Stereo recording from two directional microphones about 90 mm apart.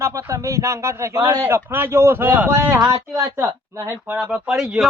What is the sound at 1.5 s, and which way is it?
A man's voice, 25° right (ahead or behind).